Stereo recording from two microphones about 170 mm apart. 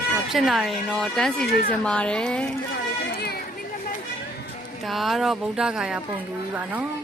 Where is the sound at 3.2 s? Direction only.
70° left (ahead or behind).